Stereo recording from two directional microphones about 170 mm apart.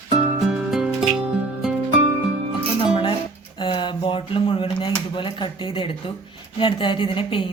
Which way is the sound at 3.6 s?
30° left (ahead or behind).